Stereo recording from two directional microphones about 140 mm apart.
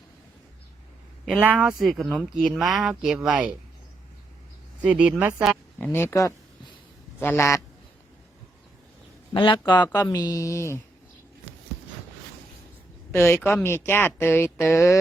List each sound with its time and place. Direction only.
1.4 s speech: 10° right (ahead or behind)
4.8 s speech: 10° right (ahead or behind)
5.8 s speech: 15° left (ahead or behind)
9.3 s speech: 35° left (ahead or behind); by 10.8 s 20° left (ahead or behind)
13.1 s speech: 15° left (ahead or behind)